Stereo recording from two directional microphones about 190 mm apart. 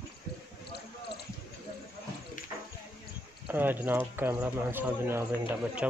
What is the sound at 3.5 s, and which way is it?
Speech, 10° right (ahead or behind).